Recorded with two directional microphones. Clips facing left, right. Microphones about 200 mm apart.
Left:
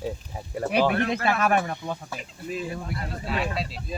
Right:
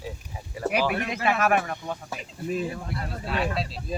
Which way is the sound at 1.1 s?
30° left (ahead or behind).